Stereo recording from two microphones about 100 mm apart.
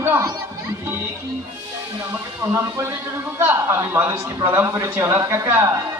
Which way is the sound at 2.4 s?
25° right (ahead or behind).